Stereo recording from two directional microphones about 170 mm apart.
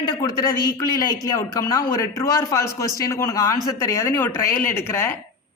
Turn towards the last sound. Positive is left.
turn(degrees=15)  # may be behind; listen again after turning